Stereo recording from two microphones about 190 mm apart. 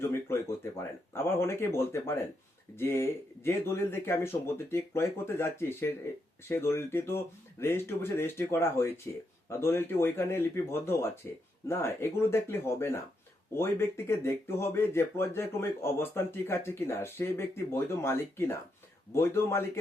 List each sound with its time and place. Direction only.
0.0 s speech: 15° left (ahead or behind)